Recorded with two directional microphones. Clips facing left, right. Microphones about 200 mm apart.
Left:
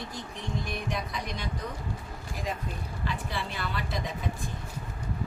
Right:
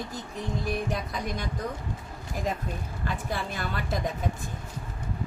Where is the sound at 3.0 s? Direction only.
45° right (ahead or behind).